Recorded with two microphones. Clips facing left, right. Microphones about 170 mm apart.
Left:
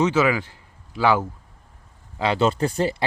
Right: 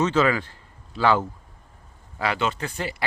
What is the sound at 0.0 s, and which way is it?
Speech, 10° left (ahead or behind).